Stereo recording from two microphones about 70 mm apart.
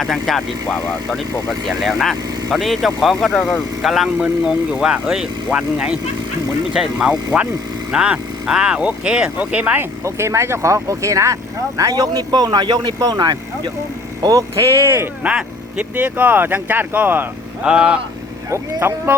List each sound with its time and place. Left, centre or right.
0.0 s speech: centre
10.0 s speech: right
11.8 s a man's voice: right
13.0 s a man's voice: right
14.2 s speech: right
14.8 s speech: right
15.2 s speech: centre
17.6 s speech: centre
18.5 s speech: right